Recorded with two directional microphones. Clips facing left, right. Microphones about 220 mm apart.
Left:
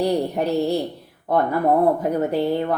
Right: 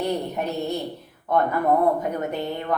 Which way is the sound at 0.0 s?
35° left (ahead or behind).